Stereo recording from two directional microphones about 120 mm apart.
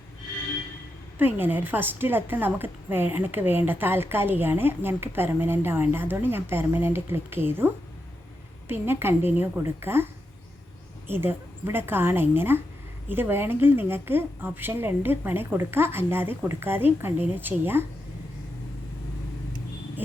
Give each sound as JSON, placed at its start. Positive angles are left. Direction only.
{"t": 1.2, "sound": "a woman's voice", "side_deg": -15}
{"t": 11.1, "sound": "a woman's voice", "side_deg": -20}